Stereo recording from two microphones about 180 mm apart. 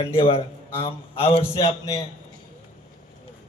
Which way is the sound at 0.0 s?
30° left (ahead or behind).